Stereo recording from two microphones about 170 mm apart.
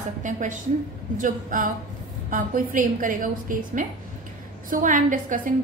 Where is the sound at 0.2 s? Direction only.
50° right (ahead or behind).